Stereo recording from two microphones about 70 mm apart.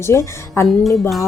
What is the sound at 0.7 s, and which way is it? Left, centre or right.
Music, centre.